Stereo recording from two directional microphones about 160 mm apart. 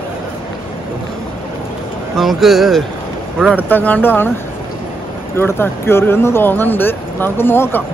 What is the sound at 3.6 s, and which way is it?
Speech, 10° left (ahead or behind).